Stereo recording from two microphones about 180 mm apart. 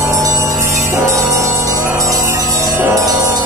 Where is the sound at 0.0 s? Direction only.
15° right (ahead or behind).